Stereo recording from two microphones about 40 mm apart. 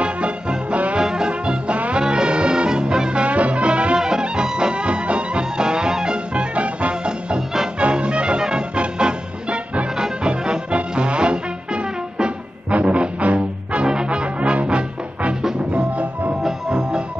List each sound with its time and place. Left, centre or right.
0.0 s music: right
0.9 s music: centre
7.8 s music: right
13.8 s music: right